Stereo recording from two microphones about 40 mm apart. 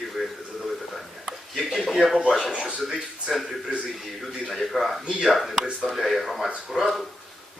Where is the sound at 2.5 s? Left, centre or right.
Right.